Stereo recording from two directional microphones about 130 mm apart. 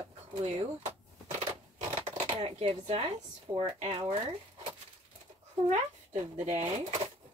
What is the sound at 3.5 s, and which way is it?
Speech, 50° right (ahead or behind).